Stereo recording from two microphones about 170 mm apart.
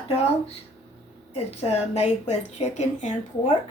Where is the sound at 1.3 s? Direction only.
35° left (ahead or behind).